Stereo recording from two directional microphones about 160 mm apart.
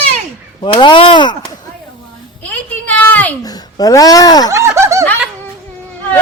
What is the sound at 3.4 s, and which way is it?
Speech, 25° left (ahead or behind).